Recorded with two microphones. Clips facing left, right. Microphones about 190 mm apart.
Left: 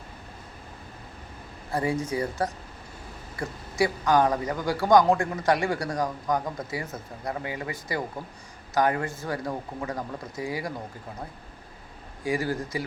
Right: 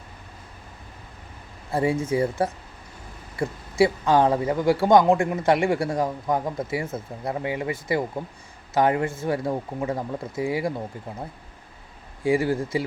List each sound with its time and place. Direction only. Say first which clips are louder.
1.7 s speech: right 4 dB; 25° right (ahead or behind)
12.2 s speech: right 6 dB; 25° right (ahead or behind)